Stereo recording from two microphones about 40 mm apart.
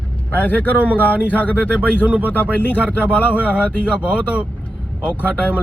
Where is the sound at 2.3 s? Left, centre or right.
Left.